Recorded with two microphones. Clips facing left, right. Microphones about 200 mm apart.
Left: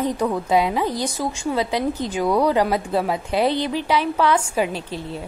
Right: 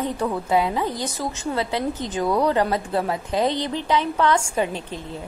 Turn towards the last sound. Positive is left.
turn(degrees=10)  # may be behind; listen again after turning